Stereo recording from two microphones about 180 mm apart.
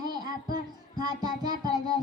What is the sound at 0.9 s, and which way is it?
A child's voice, 20° right (ahead or behind).